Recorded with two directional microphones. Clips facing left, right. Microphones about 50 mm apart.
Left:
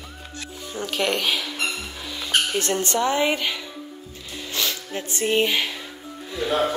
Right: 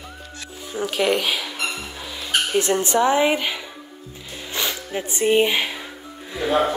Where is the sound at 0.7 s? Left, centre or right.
Centre.